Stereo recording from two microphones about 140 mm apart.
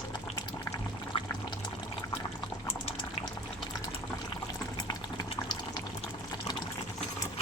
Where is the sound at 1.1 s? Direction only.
40° left (ahead or behind).